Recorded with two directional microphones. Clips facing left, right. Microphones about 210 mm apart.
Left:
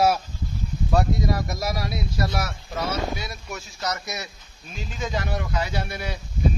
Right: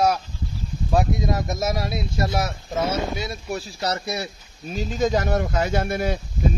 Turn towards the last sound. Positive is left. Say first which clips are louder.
# right 7 dB
turn(degrees=-50)  # may be behind; listen again after turning